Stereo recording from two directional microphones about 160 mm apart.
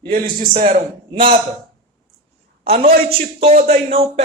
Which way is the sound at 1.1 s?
35° right (ahead or behind).